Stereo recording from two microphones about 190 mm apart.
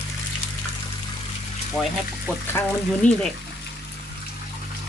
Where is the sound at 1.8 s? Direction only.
5° left (ahead or behind).